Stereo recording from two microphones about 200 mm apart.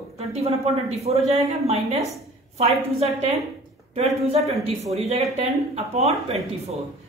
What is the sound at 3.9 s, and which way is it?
A woman's voice, 30° right (ahead or behind).